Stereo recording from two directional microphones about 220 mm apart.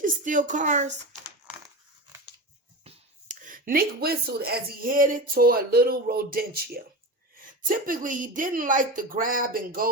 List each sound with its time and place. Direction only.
0.0 s speech: 35° right (ahead or behind)
1.5 s crushing: 5° right (ahead or behind)
2.8 s a sound: 30° right (ahead or behind)
4.8 s speech: 40° right (ahead or behind)
7.9 s speech: 35° right (ahead or behind)